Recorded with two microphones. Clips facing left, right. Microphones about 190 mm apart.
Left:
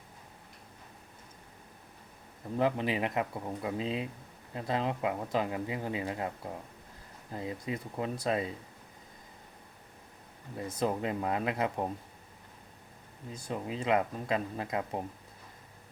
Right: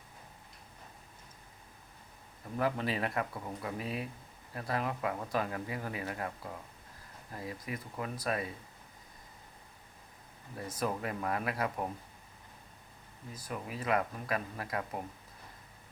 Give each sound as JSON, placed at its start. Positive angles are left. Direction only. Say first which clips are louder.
{"t": 2.6, "sound": "speech", "louder": "left 3 dB", "side_deg": 20}
{"t": 10.8, "sound": "speech", "louder": "left 4 dB", "side_deg": 25}
{"t": 13.3, "sound": "speech", "louder": "left 4 dB", "side_deg": 25}